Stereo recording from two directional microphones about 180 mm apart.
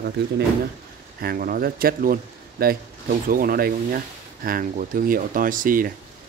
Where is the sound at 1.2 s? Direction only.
55° right (ahead or behind).